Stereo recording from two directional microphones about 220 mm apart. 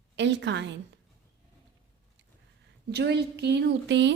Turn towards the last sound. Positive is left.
turn(degrees=-55)  # may be behind; listen again after turning